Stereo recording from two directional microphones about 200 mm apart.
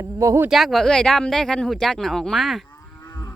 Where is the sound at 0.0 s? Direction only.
15° right (ahead or behind).